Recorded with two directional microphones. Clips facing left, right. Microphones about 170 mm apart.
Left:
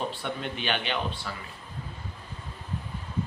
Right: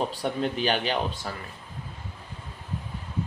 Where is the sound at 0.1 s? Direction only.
40° right (ahead or behind).